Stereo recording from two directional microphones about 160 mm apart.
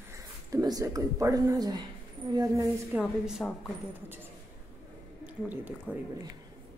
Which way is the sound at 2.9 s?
5° right (ahead or behind).